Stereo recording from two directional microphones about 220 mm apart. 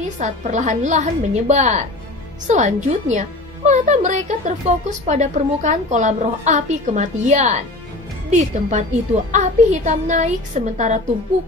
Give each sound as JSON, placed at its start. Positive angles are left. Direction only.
{"t": 0.2, "sound": "a woman's voice", "side_deg": -30}